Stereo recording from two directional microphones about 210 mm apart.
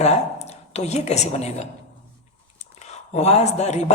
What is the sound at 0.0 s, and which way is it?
A woman's voice, 30° left (ahead or behind).